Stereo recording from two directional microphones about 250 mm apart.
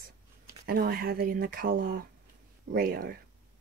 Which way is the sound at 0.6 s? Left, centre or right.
Right.